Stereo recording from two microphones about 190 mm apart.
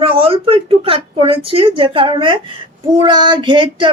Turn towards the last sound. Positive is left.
turn(degrees=-25)  # may be behind; listen again after turning